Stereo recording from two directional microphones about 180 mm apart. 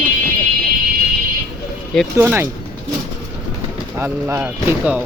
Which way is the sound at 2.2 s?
10° right (ahead or behind).